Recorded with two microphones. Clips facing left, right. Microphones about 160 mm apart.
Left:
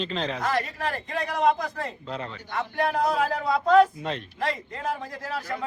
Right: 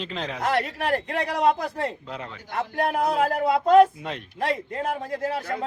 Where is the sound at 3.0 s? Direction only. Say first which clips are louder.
Right 2 dB; 55° right (ahead or behind).